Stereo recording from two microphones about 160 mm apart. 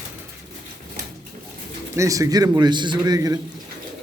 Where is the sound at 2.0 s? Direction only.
20° right (ahead or behind).